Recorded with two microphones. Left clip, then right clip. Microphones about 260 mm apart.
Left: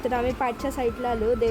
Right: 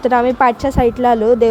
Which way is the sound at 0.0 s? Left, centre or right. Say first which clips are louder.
Right 13 dB; centre.